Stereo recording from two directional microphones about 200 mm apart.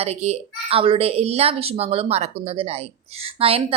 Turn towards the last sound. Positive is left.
turn(degrees=-30)  # may be behind; listen again after turning